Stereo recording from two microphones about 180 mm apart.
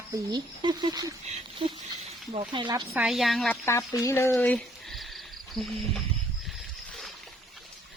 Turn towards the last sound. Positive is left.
turn(degrees=0)  # may be behind; listen again after turning